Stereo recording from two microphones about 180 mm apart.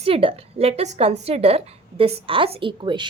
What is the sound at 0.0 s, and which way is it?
A woman's voice, 30° right (ahead or behind).